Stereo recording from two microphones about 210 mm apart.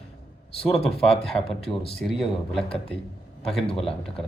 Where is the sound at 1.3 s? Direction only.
20° left (ahead or behind).